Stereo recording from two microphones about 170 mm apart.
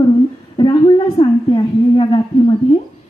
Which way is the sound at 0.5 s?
30° left (ahead or behind).